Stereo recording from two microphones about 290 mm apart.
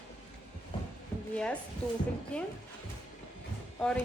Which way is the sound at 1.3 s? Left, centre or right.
Centre.